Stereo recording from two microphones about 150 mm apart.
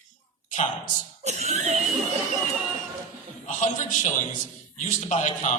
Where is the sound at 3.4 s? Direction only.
55° left (ahead or behind).